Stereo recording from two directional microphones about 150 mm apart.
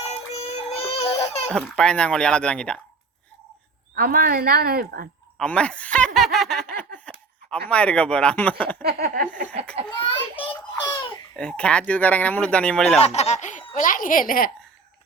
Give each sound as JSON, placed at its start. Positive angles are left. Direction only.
{"t": 0.1, "sound": "synthetic singing", "side_deg": 45}
{"t": 1.5, "sound": "speech", "side_deg": 5}
{"t": 3.9, "sound": "speech", "side_deg": -70}
{"t": 5.4, "sound": "speech", "side_deg": 5}
{"t": 6.1, "sound": "a sound", "side_deg": 0}
{"t": 7.7, "sound": "speech", "side_deg": 10}
{"t": 8.8, "sound": "a sound", "side_deg": -90}
{"t": 10.0, "sound": "a sound", "side_deg": 35}
{"t": 11.3, "sound": "speech", "side_deg": 5}
{"t": 13.0, "sound": "speech", "side_deg": 45}
{"t": 13.7, "sound": "speech", "side_deg": 65}